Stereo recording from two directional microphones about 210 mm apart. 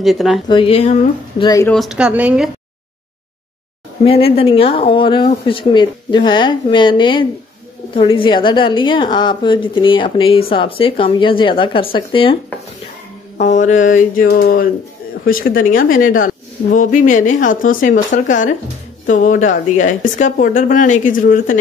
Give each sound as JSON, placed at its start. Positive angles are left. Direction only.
{"t": 0.0, "sound": "a woman's voice", "side_deg": 0}
{"t": 0.5, "sound": "a woman's voice", "side_deg": 25}
{"t": 1.4, "sound": "speech", "side_deg": 20}
{"t": 1.7, "sound": "a woman's voice", "side_deg": 0}
{"t": 4.0, "sound": "a woman's voice", "side_deg": 30}
{"t": 13.4, "sound": "speech", "side_deg": 35}